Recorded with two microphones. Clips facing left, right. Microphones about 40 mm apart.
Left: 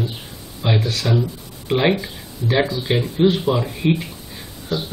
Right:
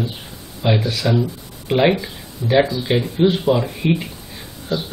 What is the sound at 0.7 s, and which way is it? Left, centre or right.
Speech, right.